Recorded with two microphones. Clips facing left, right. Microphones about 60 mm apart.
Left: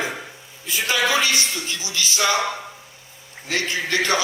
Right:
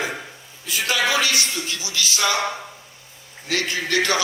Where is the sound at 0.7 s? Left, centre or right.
Left.